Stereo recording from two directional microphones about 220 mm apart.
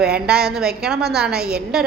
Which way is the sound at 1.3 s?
45° right (ahead or behind).